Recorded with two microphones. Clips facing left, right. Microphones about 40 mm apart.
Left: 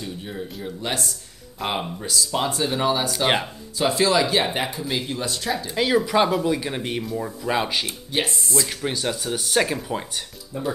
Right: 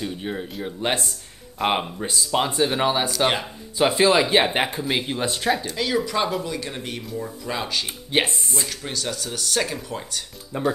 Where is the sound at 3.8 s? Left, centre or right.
Right.